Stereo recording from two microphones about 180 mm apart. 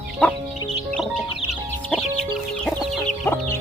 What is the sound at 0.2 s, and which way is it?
Music, 5° left (ahead or behind).